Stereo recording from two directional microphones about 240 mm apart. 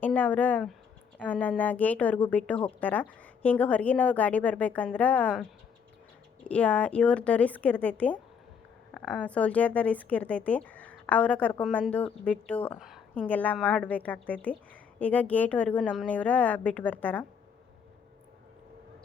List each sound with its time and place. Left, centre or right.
0.0 s speech: centre